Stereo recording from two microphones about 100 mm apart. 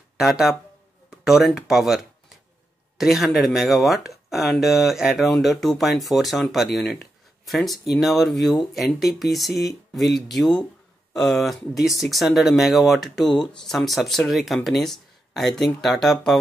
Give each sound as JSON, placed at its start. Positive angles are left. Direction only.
{"t": 0.2, "sound": "speech", "side_deg": -5}
{"t": 3.0, "sound": "speech", "side_deg": 0}